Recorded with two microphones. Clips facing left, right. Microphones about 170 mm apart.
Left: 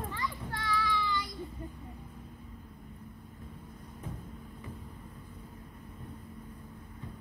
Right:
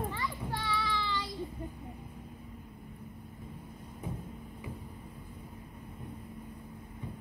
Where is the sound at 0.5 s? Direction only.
25° right (ahead or behind).